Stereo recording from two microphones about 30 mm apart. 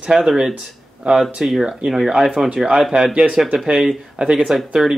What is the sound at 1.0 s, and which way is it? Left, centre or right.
Speech, right.